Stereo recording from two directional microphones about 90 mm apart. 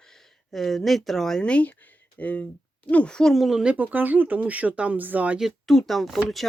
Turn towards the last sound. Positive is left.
turn(degrees=0)  # may be behind; listen again after turning